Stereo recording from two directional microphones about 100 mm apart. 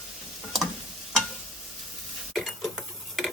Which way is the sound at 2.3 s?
Centre (ahead or behind).